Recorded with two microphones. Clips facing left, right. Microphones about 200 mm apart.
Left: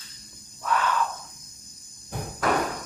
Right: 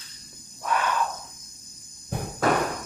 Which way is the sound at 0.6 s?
15° right (ahead or behind).